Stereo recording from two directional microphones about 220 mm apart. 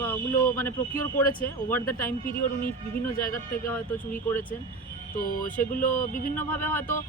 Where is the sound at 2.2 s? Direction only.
40° left (ahead or behind).